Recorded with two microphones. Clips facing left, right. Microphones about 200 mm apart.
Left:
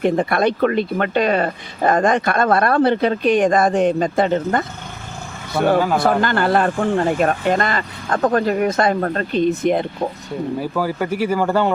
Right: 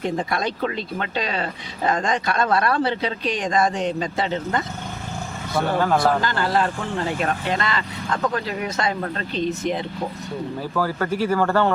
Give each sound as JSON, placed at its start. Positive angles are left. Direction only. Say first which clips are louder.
{"t": 0.0, "sound": "speech", "louder": "left 7 dB", "side_deg": 60}
{"t": 5.8, "sound": "speech", "louder": "left 1 dB", "side_deg": 5}
{"t": 6.2, "sound": "speech", "louder": "left 5 dB", "side_deg": 60}
{"t": 10.6, "sound": "speech", "louder": "even", "side_deg": 15}